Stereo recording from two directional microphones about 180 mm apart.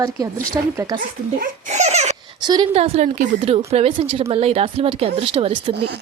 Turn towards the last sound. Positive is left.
turn(degrees=-30)  # may be behind; listen again after turning